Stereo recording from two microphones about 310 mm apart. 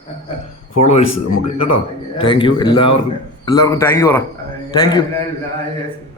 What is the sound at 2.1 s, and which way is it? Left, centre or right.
A man's voice, centre.